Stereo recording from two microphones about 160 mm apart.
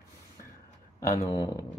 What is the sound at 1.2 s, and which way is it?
Speech, 20° left (ahead or behind).